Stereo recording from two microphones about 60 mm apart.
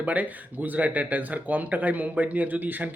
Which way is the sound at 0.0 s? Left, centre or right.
Right.